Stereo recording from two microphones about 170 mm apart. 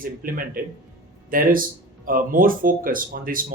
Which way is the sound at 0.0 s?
55° right (ahead or behind).